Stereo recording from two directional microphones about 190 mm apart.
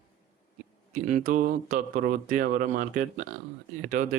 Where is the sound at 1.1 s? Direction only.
45° right (ahead or behind).